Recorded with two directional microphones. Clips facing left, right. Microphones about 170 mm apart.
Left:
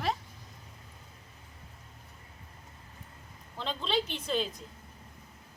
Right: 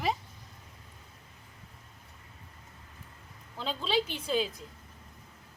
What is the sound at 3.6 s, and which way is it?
Speech, 5° right (ahead or behind).